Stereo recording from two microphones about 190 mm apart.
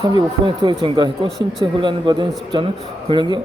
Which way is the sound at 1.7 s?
25° right (ahead or behind).